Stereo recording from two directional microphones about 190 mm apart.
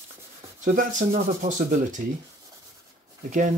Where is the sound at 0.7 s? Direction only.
45° right (ahead or behind).